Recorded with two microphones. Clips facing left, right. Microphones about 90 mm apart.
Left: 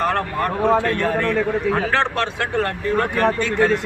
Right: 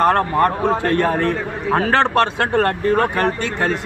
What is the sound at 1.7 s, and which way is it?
Speech, 50° right (ahead or behind).